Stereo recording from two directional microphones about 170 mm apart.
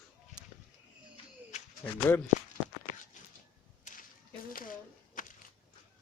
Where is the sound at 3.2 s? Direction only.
50° left (ahead or behind).